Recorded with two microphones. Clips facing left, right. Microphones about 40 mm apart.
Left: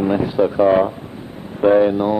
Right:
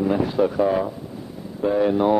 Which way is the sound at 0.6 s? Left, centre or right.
Left.